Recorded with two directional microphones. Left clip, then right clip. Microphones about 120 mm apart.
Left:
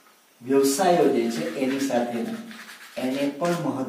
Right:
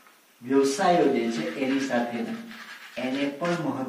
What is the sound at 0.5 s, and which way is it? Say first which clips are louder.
Speech: left 2 dB; 30° left (ahead or behind).